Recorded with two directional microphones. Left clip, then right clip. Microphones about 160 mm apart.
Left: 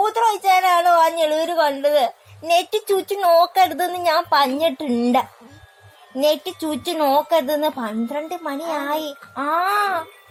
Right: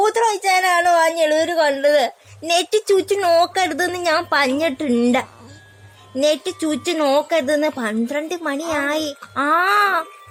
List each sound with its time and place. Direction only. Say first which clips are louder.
0.0 s a woman's voice: right 1 dB; 45° right (ahead or behind)
9.3 s a woman's voice: right 3 dB; 55° right (ahead or behind)